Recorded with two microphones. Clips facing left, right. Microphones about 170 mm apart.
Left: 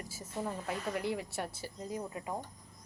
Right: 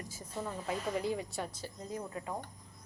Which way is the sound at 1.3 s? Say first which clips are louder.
Left 1 dB; 5° left (ahead or behind).